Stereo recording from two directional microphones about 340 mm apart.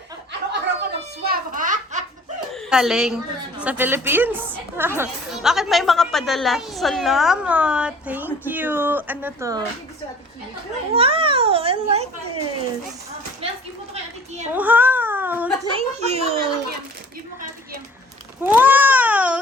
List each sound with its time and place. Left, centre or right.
0.6 s a sound: right
2.5 s a woman's voice: centre
10.9 s a child's voice: centre
13.4 s a sound: centre
14.5 s whimper: centre
15.8 s a child's voice: centre
18.4 s a woman's voice: centre